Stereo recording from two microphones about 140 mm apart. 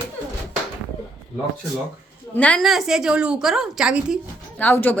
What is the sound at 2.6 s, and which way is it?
A woman's voice, centre (ahead or behind).